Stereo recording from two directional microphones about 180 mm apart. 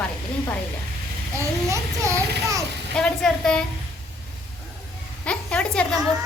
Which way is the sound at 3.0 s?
5° left (ahead or behind).